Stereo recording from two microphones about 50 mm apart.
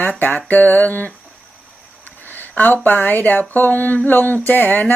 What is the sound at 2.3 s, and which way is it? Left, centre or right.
Speech, left.